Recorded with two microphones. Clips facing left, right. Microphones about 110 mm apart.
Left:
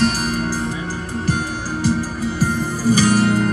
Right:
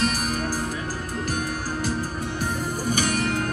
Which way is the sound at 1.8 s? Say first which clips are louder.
Left 11 dB; 90° left.